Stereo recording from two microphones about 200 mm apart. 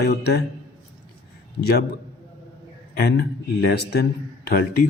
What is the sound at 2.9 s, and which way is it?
Speech, 55° left (ahead or behind).